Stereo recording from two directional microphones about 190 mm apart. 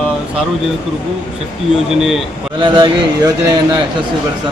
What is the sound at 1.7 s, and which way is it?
Speech, centre (ahead or behind).